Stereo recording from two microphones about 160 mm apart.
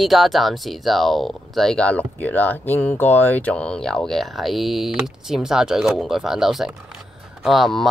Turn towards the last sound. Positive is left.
turn(degrees=0)  # may be behind; listen again after turning